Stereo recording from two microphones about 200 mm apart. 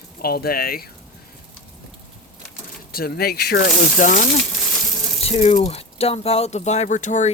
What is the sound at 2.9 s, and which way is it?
Speech, 50° left (ahead or behind).